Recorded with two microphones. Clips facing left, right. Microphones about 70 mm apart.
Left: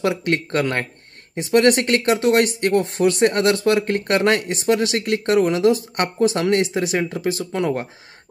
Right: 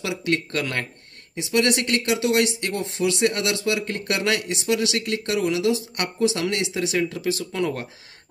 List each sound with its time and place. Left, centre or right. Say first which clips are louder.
0.0 s speech: left 4 dB; left